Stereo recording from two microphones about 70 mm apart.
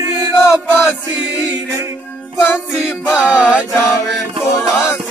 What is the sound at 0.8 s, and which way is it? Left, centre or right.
Music, centre.